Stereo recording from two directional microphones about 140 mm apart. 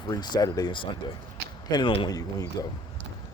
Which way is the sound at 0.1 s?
30° left (ahead or behind).